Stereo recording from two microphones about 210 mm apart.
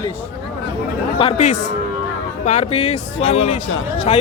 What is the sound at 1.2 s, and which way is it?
Speech, 30° left (ahead or behind).